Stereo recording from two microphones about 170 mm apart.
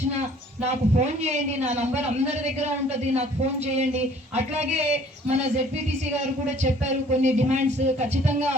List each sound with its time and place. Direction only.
0.6 s a man's voice: 40° right (ahead or behind)
3.8 s a man's voice: 40° right (ahead or behind)